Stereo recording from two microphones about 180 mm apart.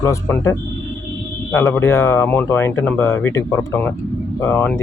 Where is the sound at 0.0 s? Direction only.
15° left (ahead or behind).